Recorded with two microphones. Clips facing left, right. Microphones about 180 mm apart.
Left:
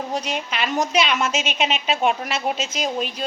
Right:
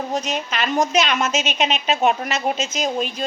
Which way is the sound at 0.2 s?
45° right (ahead or behind).